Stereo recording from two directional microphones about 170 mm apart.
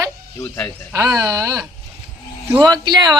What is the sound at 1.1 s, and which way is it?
Speech, 20° right (ahead or behind).